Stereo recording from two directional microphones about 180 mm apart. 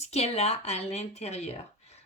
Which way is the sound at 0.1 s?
35° left (ahead or behind).